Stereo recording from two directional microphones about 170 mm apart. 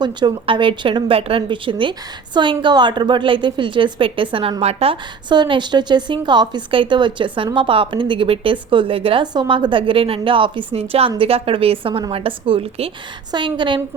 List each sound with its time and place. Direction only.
0.0 s a woman's voice: 25° right (ahead or behind)